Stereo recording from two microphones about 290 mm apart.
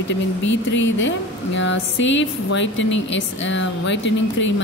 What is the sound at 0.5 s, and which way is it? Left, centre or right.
Speech, left.